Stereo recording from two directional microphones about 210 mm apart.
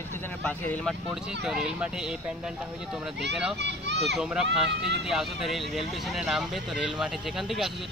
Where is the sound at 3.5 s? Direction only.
55° right (ahead or behind).